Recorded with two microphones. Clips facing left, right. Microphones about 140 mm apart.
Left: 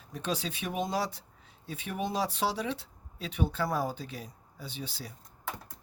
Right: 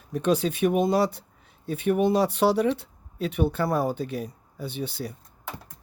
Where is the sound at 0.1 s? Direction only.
55° right (ahead or behind).